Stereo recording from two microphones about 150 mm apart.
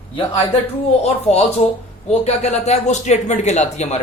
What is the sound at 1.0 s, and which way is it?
Speech, 45° left (ahead or behind).